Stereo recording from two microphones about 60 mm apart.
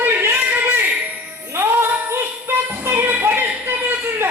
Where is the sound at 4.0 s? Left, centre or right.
Right.